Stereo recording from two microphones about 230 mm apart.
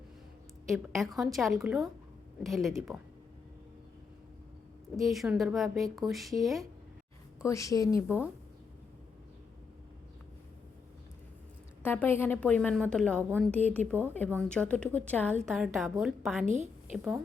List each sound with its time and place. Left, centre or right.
0.7 s a woman's voice: centre
4.9 s a woman's voice: centre
7.4 s a woman's voice: centre
8.0 s speech: centre
11.8 s a woman's voice: centre